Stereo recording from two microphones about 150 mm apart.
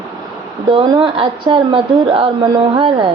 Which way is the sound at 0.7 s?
35° right (ahead or behind).